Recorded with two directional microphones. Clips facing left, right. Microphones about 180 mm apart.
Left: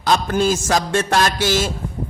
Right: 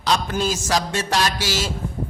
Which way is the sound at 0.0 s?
50° left (ahead or behind).